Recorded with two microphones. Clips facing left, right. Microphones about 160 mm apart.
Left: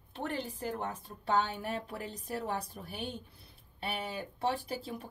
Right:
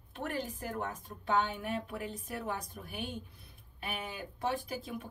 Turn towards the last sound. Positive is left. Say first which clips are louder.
# left 1 dB
turn(degrees=35)  # may be behind; listen again after turning